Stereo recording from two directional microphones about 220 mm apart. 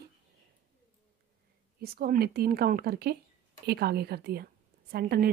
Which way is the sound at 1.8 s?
45° right (ahead or behind).